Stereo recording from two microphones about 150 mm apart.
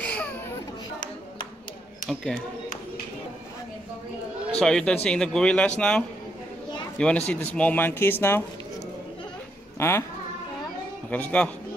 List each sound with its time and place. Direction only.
0.0 s baby cry: 10° left (ahead or behind)
2.0 s a man's voice: 5° left (ahead or behind)
4.6 s a man's voice: 5° left (ahead or behind)
9.8 s speech: 15° left (ahead or behind)
11.1 s speech: 10° left (ahead or behind)